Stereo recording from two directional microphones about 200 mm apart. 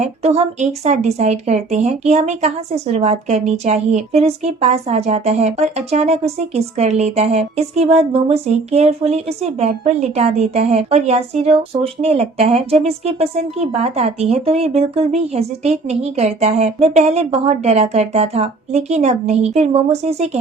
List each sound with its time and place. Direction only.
0.0 s a woman's voice: 35° right (ahead or behind)